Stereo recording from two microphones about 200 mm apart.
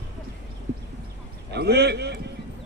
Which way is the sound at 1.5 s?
55° right (ahead or behind).